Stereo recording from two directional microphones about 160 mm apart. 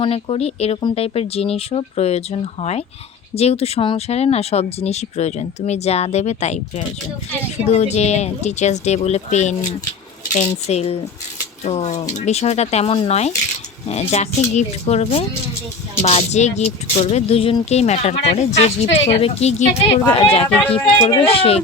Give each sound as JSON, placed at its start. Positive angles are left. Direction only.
{"t": 0.0, "sound": "speech", "side_deg": 35}
{"t": 20.5, "sound": "speech", "side_deg": 10}
{"t": 21.0, "sound": "speech", "side_deg": 30}